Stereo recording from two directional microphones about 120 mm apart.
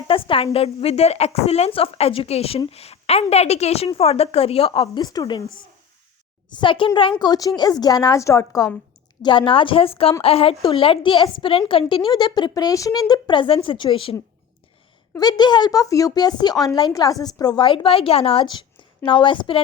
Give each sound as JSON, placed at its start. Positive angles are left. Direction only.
{"t": 0.1, "sound": "a woman's voice", "side_deg": 50}
{"t": 5.0, "sound": "speech", "side_deg": 35}
{"t": 6.6, "sound": "a woman's voice", "side_deg": 45}
{"t": 7.2, "sound": "speech", "side_deg": 30}
{"t": 9.2, "sound": "a woman's voice", "side_deg": 45}
{"t": 15.2, "sound": "speech", "side_deg": 35}
{"t": 17.7, "sound": "a woman's voice", "side_deg": 50}
{"t": 19.0, "sound": "a woman's voice", "side_deg": 45}